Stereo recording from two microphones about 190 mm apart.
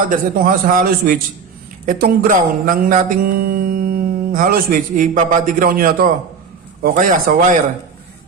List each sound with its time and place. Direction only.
0.0 s speech: 45° right (ahead or behind)